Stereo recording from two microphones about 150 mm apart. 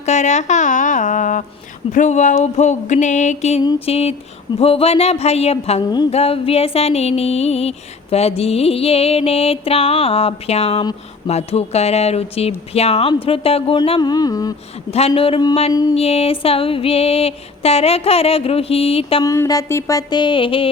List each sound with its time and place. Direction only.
0.0 s speech: 50° left (ahead or behind)
3.8 s music: 40° left (ahead or behind)
4.6 s speech: 40° left (ahead or behind)
6.1 s music: 40° left (ahead or behind)
11.3 s speech: 45° left (ahead or behind)
13.7 s music: 35° left (ahead or behind)
14.8 s music: 40° left (ahead or behind)
15.7 s music: 25° left (ahead or behind)
16.0 s music: 40° left (ahead or behind)
19.2 s music: 20° left (ahead or behind)